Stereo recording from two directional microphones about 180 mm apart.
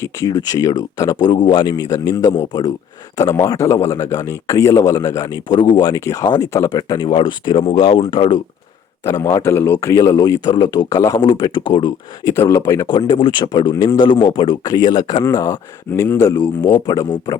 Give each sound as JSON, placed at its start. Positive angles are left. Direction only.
{"t": 0.0, "sound": "a man's voice", "side_deg": 20}